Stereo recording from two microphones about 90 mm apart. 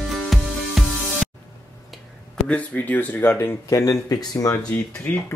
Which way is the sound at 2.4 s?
15° left (ahead or behind).